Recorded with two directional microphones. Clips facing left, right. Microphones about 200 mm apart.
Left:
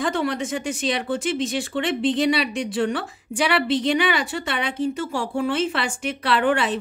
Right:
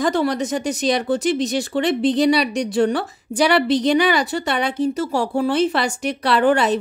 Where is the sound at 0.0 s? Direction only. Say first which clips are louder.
Right 4 dB; 40° right (ahead or behind).